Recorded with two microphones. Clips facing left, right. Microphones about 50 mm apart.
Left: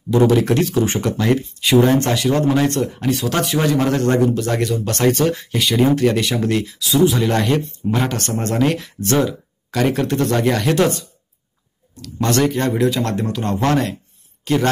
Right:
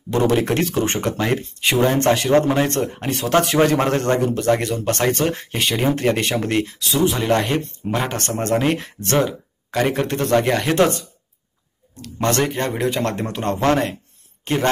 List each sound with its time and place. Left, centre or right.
0.3 s speech: right
0.9 s a man's voice: right
3.1 s speech: right
7.2 s a man's voice: right
7.8 s speech: right
8.4 s a man's voice: right